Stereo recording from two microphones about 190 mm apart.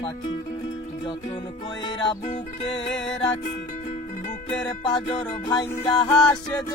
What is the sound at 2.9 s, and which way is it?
Music, 5° left (ahead or behind).